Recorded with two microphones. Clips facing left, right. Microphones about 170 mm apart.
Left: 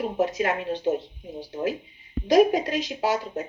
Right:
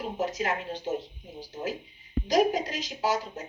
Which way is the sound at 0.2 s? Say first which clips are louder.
Left 5 dB; 60° left (ahead or behind).